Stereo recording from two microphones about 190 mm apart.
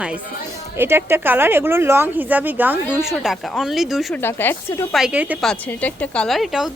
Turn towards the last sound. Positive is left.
turn(degrees=0)  # may be behind; listen again after turning